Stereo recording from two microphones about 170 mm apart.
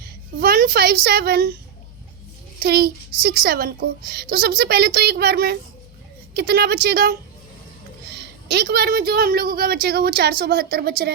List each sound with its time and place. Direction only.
0.3 s a woman's voice: 60° right (ahead or behind)
2.6 s a child's voice: 65° right (ahead or behind)